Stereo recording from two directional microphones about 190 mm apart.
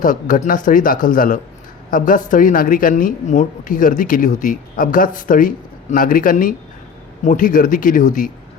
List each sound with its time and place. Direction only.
0.0 s a woman's voice: 45° left (ahead or behind)